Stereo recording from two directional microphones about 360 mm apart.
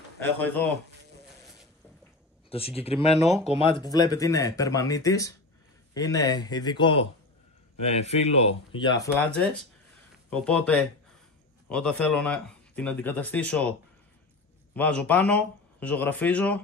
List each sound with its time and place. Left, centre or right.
0.2 s speech: centre
2.5 s speech: centre
14.8 s speech: centre